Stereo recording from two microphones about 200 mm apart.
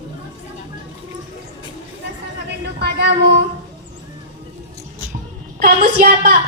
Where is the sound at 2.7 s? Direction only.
55° right (ahead or behind).